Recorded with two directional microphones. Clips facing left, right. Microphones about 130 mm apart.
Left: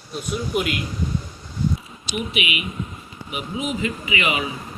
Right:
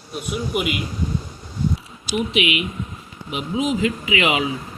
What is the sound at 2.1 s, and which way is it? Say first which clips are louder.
Speech: right 5 dB; 5° right (ahead or behind).